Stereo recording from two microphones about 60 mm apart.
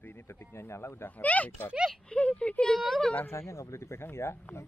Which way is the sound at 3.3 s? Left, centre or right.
Left.